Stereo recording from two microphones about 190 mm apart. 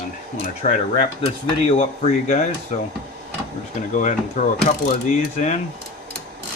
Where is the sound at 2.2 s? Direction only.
40° left (ahead or behind).